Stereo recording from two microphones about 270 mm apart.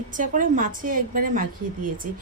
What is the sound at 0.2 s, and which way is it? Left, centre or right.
Speech, right.